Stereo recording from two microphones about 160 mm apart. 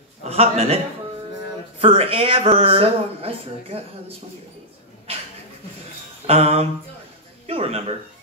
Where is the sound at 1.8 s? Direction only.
35° right (ahead or behind).